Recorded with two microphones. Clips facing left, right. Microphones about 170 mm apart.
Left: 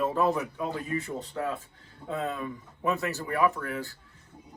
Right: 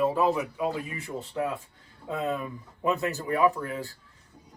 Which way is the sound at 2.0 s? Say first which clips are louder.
Right 2 dB; 15° right (ahead or behind).